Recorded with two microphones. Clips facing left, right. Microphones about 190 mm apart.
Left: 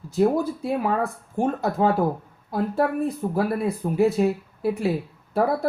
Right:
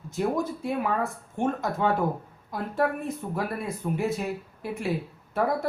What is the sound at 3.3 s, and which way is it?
Speech, 35° left (ahead or behind).